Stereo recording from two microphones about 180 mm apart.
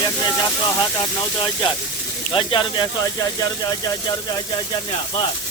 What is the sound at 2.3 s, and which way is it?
Speech, 30° left (ahead or behind).